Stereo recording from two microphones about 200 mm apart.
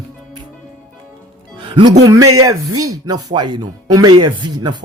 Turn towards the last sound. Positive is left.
turn(degrees=-20)  # may be behind; listen again after turning